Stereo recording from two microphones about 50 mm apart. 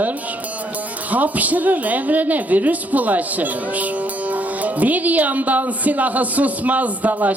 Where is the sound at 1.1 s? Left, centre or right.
Right.